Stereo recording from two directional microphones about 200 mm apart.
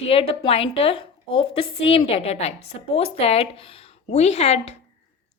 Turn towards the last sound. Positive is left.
turn(degrees=30)  # may be behind; listen again after turning